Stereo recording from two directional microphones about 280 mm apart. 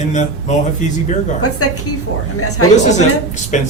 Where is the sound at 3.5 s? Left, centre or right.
Left.